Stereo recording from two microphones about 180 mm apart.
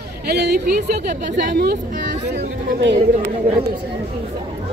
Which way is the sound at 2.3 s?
65° right (ahead or behind).